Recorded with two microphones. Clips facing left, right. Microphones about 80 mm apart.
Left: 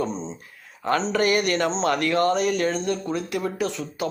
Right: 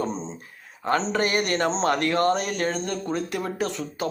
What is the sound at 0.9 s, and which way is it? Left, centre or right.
A man's voice, right.